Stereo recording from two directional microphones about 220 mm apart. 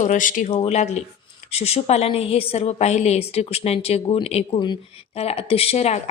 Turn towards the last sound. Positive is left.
turn(degrees=30)  # may be behind; listen again after turning